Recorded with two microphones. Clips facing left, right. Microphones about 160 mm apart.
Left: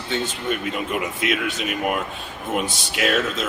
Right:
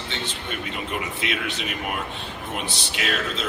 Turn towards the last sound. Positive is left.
turn(degrees=50)  # may be behind; listen again after turning